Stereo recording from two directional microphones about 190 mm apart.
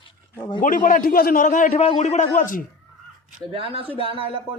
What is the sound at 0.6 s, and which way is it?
A man's voice, 45° left (ahead or behind).